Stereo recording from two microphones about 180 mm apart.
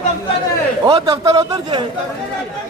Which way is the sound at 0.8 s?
20° right (ahead or behind).